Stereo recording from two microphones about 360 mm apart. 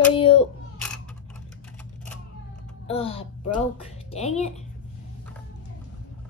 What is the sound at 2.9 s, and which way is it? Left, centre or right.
Speech, centre.